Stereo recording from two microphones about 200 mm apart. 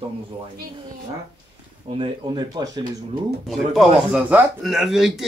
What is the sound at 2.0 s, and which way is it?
Speech, 20° right (ahead or behind).